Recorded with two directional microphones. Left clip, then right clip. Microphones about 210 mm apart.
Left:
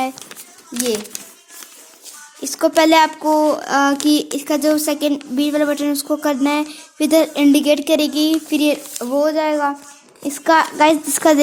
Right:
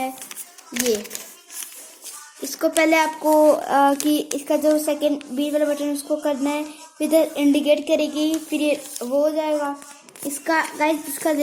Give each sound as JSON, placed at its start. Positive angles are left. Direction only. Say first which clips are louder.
{"t": 0.8, "sound": "speech", "louder": "left 1 dB", "side_deg": 35}
{"t": 2.4, "sound": "speech", "louder": "left 5 dB", "side_deg": 45}
{"t": 3.3, "sound": "a sound", "louder": "right 3 dB", "side_deg": 30}
{"t": 4.0, "sound": "speech", "louder": "left 5 dB", "side_deg": 35}
{"t": 5.4, "sound": "a sound", "louder": "left 4 dB", "side_deg": 55}
{"t": 10.2, "sound": "speech", "louder": "left 7 dB", "side_deg": 50}